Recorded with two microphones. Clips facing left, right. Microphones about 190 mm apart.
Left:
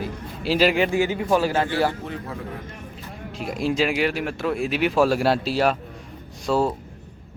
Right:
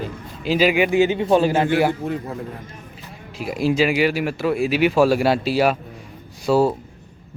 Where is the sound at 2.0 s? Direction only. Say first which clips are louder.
Right 7 dB; 45° right (ahead or behind).